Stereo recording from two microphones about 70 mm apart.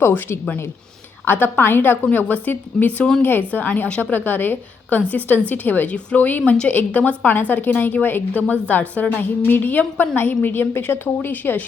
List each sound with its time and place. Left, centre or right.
1.2 s a woman's voice: left
3.0 s a woman's voice: centre
3.2 s a woman's voice: left